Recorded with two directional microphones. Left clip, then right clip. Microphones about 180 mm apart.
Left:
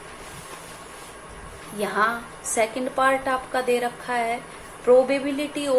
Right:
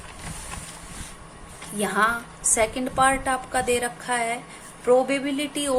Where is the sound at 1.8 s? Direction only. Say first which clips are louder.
Right 1 dB; 20° right (ahead or behind).